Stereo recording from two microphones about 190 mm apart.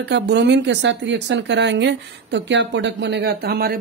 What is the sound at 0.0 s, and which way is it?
Speech, 65° right (ahead or behind).